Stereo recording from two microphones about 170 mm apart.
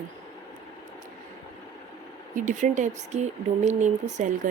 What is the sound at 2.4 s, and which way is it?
Speech, 50° right (ahead or behind).